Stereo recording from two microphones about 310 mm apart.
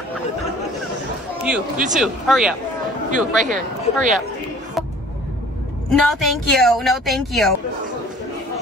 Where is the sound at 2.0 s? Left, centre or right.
Centre.